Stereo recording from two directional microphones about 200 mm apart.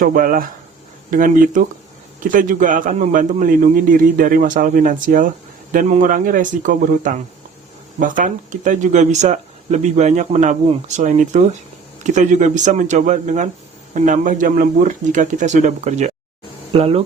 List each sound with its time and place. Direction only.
0.0 s speech: 45° right (ahead or behind)